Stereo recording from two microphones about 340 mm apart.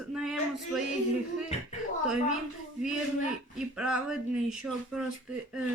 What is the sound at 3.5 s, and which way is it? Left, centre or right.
Speech, centre.